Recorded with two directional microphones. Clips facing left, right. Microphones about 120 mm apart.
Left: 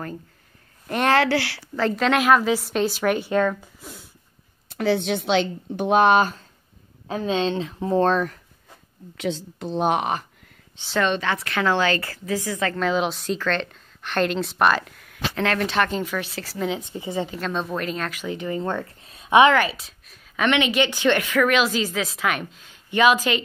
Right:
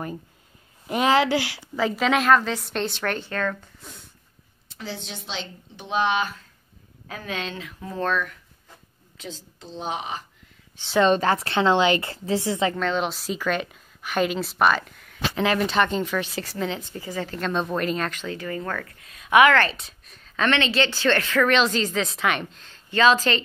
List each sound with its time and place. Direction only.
0.8 s speech: 10° right (ahead or behind)
1.8 s a woman's voice: 5° right (ahead or behind); by 3.7 s 15° left (ahead or behind)
3.8 s snort: 5° left (ahead or behind)
4.6 s speech: 60° left (ahead or behind); by 6.4 s 40° left (ahead or behind)
7.1 s speech: 25° left (ahead or behind)
9.1 s speech: 70° left (ahead or behind)
11.1 s speech: 40° right (ahead or behind)
11.5 s a woman's voice: 20° right (ahead or behind)
12.7 s a woman's voice: centre (ahead or behind)
16.9 s speech: 20° left (ahead or behind)
17.3 s a woman's voice: centre (ahead or behind)
18.2 s speech: 20° left (ahead or behind)
19.5 s a woman's voice: 10° left (ahead or behind)
20.3 s speech: 10° left (ahead or behind)